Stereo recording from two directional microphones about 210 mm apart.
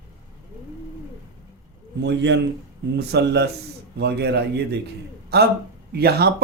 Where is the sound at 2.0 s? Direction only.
55° right (ahead or behind).